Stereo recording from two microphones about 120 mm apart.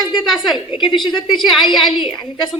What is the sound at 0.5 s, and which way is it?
Speech, 45° left (ahead or behind).